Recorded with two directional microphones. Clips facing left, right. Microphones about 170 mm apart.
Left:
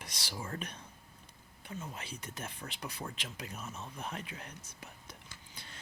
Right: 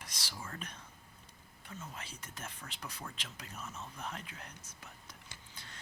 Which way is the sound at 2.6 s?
30° left (ahead or behind).